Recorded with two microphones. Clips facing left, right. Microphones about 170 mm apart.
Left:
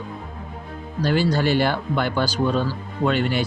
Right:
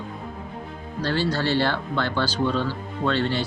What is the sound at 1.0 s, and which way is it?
Speech, 15° left (ahead or behind).